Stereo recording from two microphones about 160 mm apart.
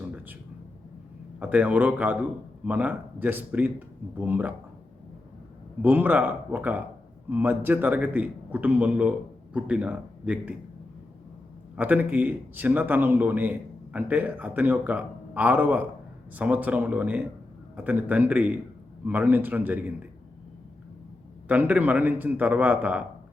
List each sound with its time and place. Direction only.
1.4 s a man's voice: 10° right (ahead or behind)
5.8 s a man's voice: 10° right (ahead or behind)
11.8 s a man's voice: 10° right (ahead or behind)
21.4 s a man's voice: 10° right (ahead or behind)